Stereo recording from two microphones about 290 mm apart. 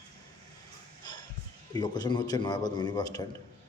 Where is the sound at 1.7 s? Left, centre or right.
Centre.